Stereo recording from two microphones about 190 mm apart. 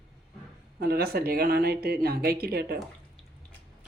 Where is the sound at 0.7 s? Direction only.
55° right (ahead or behind).